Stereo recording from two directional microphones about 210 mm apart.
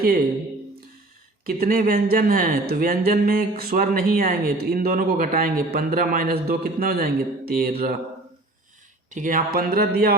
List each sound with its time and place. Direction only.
1.5 s speech: 45° right (ahead or behind)
9.0 s speech: 40° right (ahead or behind)